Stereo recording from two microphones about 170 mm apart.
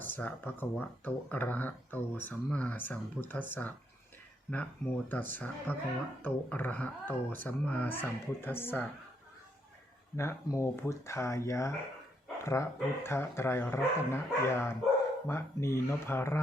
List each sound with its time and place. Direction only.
0.0 s speech: 10° left (ahead or behind)
10.2 s speech: 15° left (ahead or behind)